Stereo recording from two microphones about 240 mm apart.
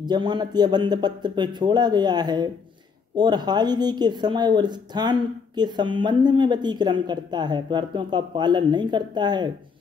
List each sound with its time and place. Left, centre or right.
0.0 s speech: centre